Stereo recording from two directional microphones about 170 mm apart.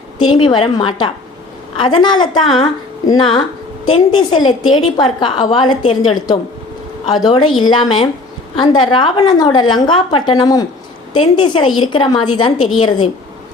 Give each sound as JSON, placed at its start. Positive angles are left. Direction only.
{"t": 0.3, "sound": "a woman's voice", "side_deg": 25}